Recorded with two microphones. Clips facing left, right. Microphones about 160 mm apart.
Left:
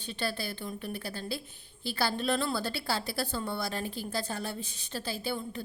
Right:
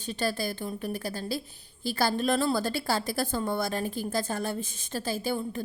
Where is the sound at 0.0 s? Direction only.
40° right (ahead or behind).